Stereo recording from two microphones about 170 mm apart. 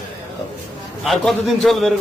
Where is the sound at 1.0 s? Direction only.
Centre (ahead or behind).